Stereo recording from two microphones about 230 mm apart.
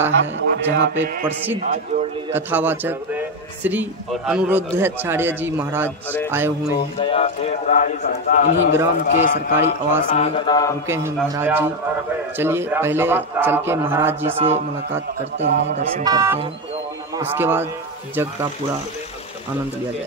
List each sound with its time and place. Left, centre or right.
0.1 s a man's voice: right
2.3 s a man's voice: centre
7.0 s a man's voice: left
10.9 s a man's voice: centre
14.3 s speech: right
15.3 s a man's voice: right
16.0 s a man's voice: centre